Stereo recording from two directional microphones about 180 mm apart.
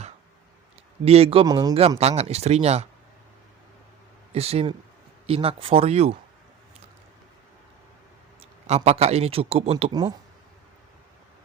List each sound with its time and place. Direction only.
1.0 s speech: 35° right (ahead or behind)
2.0 s speech: 35° right (ahead or behind)
4.3 s speech: 35° right (ahead or behind)
8.4 s a man's voice: 35° right (ahead or behind)
9.9 s speech: 20° right (ahead or behind)